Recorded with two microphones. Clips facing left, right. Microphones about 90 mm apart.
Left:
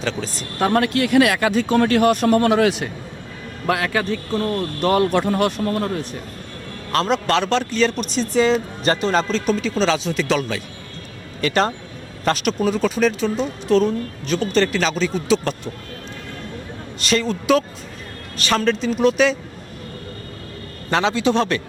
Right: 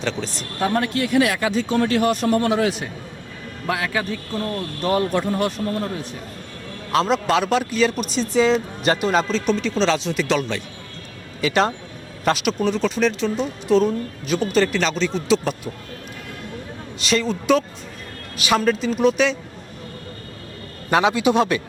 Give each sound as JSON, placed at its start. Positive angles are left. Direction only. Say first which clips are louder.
{"t": 0.0, "sound": "speech", "louder": "left 1 dB", "side_deg": 0}
{"t": 0.6, "sound": "speech", "louder": "left 3 dB", "side_deg": 70}
{"t": 3.7, "sound": "speech", "louder": "left 3 dB", "side_deg": 60}
{"t": 6.9, "sound": "speech", "louder": "even", "side_deg": 0}
{"t": 17.0, "sound": "speech", "louder": "left 1 dB", "side_deg": 0}
{"t": 20.9, "sound": "a man's voice", "louder": "right 1 dB", "side_deg": -15}